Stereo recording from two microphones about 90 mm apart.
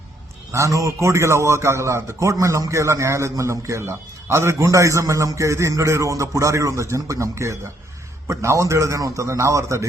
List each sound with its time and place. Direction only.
0.5 s a man's voice: 35° right (ahead or behind)